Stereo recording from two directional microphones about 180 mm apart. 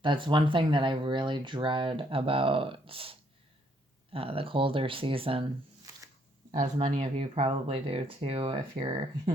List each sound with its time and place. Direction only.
0.0 s speech: 25° right (ahead or behind)
6.9 s speech: 30° right (ahead or behind)